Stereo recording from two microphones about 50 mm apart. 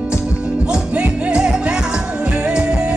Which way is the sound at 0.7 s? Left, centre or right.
Right.